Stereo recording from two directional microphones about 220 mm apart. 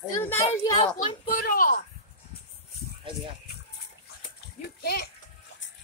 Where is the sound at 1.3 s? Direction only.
40° left (ahead or behind).